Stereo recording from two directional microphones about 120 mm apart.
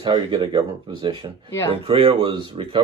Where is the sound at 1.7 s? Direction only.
50° right (ahead or behind).